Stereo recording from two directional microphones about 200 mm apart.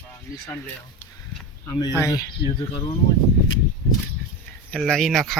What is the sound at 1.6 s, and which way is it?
Speech, 15° left (ahead or behind).